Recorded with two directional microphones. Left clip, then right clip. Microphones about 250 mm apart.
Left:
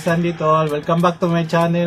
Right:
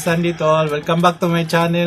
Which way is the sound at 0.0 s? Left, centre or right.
Centre.